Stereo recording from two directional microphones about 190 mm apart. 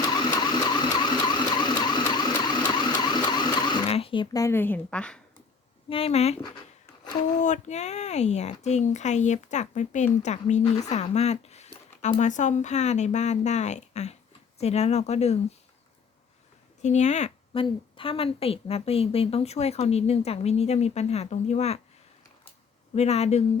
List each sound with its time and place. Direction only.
0.1 s vehicle: 20° left (ahead or behind); by 5.2 s 5° left (ahead or behind)
5.9 s a woman's voice: 30° left (ahead or behind)
7.3 s a woman's voice: 40° left (ahead or behind)
16.8 s a woman's voice: 40° left (ahead or behind)
23.0 s a woman's voice: 35° left (ahead or behind)